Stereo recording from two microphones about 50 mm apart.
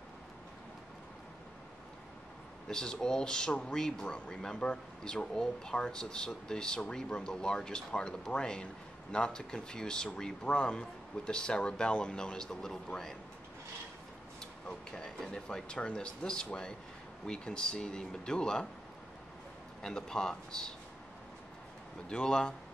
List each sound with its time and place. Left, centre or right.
2.7 s speech: centre
14.4 s speech: centre
19.8 s speech: centre
22.1 s speech: centre